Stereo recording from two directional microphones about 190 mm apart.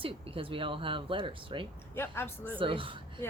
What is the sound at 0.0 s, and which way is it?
Speech, 30° right (ahead or behind).